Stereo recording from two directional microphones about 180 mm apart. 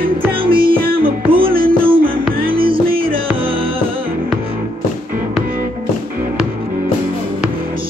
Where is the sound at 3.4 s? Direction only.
30° right (ahead or behind).